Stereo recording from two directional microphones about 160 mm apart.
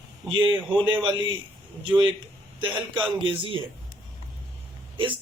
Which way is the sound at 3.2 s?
35° right (ahead or behind).